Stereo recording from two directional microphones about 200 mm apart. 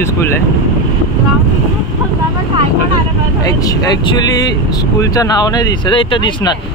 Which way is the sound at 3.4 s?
20° left (ahead or behind).